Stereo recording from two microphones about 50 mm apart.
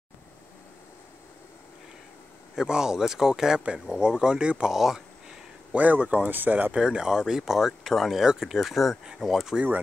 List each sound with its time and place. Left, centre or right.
2.5 s speech: centre
4.7 s speech: centre
5.7 s speech: right
6.7 s speech: centre